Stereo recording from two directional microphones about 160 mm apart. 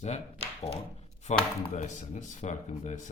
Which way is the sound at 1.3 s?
45° left (ahead or behind).